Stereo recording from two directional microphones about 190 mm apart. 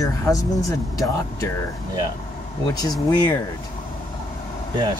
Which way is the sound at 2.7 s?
20° left (ahead or behind).